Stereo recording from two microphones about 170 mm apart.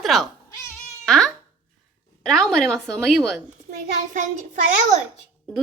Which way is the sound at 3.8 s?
50° right (ahead or behind).